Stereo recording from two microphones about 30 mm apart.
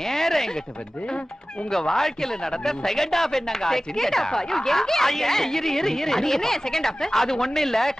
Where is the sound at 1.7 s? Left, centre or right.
Centre.